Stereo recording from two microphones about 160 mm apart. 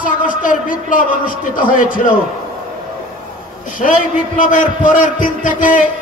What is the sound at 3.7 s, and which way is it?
A man's voice, 55° left (ahead or behind).